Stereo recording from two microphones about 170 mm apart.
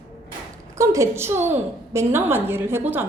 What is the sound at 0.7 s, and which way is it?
A woman's voice, 20° right (ahead or behind).